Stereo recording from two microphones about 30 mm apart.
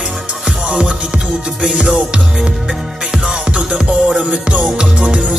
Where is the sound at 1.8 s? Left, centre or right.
Right.